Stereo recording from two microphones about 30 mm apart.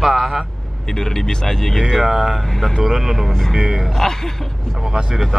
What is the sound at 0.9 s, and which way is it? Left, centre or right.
Speech, centre.